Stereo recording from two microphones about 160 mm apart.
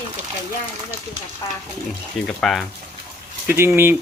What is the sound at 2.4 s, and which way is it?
Speech, centre (ahead or behind).